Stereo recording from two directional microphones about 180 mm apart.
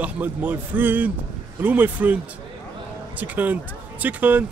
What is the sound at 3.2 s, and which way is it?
A man's voice, 10° right (ahead or behind).